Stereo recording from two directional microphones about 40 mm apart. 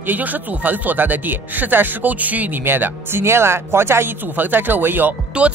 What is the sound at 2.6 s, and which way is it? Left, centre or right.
Speech, right.